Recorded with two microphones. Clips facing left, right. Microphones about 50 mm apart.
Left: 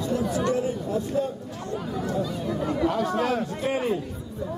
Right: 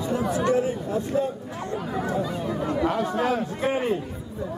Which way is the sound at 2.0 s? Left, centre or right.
Centre.